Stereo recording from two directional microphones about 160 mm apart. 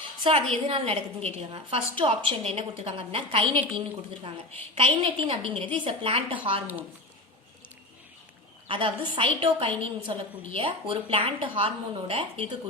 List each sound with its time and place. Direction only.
0.2 s a woman's voice: 35° right (ahead or behind)
4.7 s a woman's voice: 35° right (ahead or behind)
8.6 s a woman's voice: 30° right (ahead or behind)